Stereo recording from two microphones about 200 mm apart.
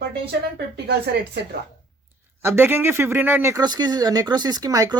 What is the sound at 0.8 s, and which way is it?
Speech, 55° right (ahead or behind).